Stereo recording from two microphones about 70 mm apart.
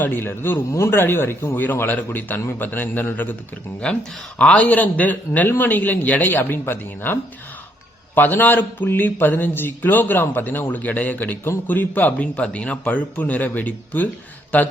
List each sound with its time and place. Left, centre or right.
0.0 s a man's voice: left
4.4 s speech: centre